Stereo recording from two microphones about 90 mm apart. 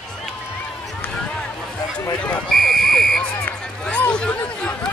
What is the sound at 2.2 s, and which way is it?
Fire alarm, 15° left (ahead or behind).